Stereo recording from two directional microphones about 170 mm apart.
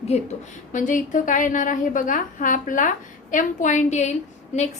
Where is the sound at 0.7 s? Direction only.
50° left (ahead or behind).